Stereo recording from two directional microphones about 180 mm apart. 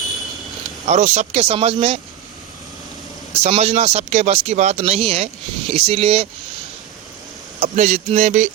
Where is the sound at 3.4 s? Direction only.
35° right (ahead or behind).